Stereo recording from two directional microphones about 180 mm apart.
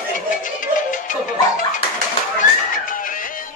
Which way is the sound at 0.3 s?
45° left (ahead or behind).